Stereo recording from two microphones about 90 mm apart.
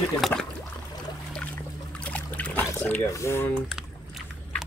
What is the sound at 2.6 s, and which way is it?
Speech, 25° left (ahead or behind).